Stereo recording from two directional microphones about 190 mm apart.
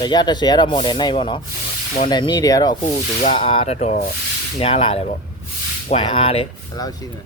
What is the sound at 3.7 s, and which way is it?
Speech, 40° left (ahead or behind).